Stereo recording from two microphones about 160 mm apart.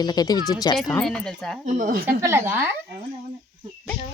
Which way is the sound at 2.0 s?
15° right (ahead or behind).